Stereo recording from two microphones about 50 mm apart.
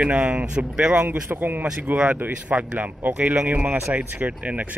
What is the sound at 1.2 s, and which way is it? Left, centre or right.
Speech, right.